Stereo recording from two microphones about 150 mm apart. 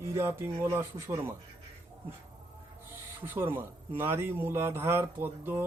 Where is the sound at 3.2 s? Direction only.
15° right (ahead or behind).